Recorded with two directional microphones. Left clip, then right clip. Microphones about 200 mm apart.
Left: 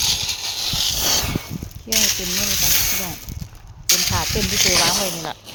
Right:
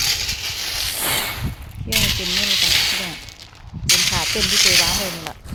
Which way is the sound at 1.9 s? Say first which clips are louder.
Right 1 dB; 20° left (ahead or behind).